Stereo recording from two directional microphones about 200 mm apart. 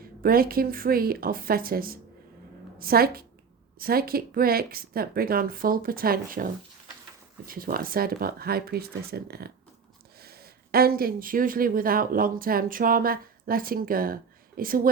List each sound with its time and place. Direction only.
0.0 s speech: 45° right (ahead or behind)